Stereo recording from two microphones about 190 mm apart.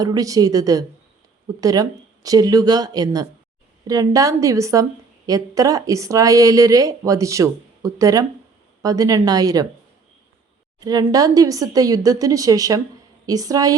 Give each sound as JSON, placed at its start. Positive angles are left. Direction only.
{"t": 0.0, "sound": "a woman's voice", "side_deg": -20}
{"t": 10.8, "sound": "speech", "side_deg": -20}